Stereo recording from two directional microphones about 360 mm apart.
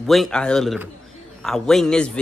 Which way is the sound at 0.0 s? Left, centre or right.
Centre.